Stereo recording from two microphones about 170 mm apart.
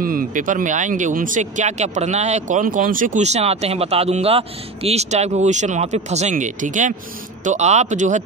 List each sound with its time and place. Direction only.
0.0 s speech: 55° right (ahead or behind)